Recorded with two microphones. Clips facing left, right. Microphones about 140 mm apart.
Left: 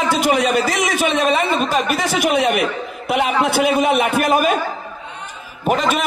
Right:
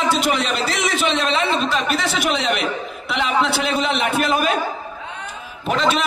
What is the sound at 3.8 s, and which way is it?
Speech, 45° left (ahead or behind).